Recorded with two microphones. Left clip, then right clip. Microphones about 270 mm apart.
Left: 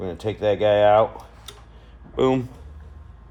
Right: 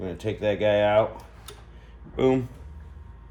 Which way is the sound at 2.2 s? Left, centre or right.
Left.